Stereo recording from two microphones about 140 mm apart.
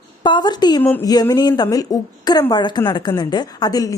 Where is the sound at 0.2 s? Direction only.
30° left (ahead or behind).